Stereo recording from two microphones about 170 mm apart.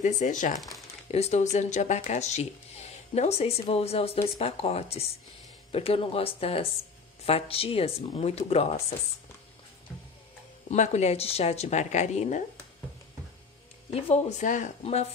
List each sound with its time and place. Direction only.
0.0 s speech: 45° left (ahead or behind)
0.6 s crumpling: centre (ahead or behind)
1.1 s speech: 40° left (ahead or behind)
10.7 s speech: 40° left (ahead or behind)
13.9 s speech: 40° left (ahead or behind)